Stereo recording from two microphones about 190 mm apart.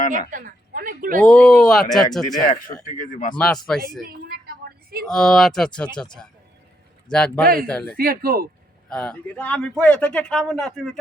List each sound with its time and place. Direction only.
0.1 s speech: 45° right (ahead or behind)
1.2 s a man's voice: 5° left (ahead or behind)
2.4 s speech: 45° left (ahead or behind)
3.3 s a man's voice: 5° left (ahead or behind)
4.2 s a sound: 55° right (ahead or behind)
5.0 s a man's voice: centre (ahead or behind)
7.9 s speech: 50° right (ahead or behind)
8.9 s a man's voice: 5° left (ahead or behind)